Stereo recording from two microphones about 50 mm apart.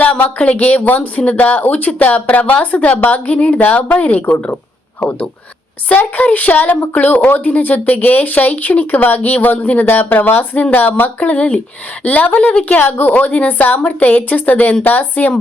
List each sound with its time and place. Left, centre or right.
0.5 s speech: left
6.0 s speech: left
13.8 s speech: left